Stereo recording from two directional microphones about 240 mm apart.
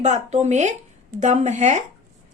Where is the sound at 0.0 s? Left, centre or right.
Right.